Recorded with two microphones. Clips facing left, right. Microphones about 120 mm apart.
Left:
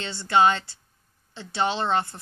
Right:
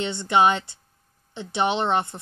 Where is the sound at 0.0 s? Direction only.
20° right (ahead or behind).